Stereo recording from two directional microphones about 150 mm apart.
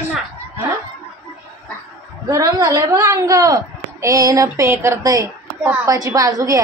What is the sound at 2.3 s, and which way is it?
A woman's voice, 20° right (ahead or behind).